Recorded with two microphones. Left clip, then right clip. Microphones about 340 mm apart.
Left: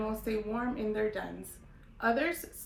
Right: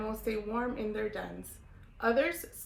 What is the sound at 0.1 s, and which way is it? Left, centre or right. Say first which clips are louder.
A woman's voice: even; centre.